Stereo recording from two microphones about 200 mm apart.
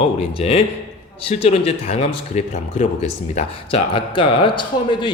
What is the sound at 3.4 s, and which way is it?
Speech, 25° left (ahead or behind).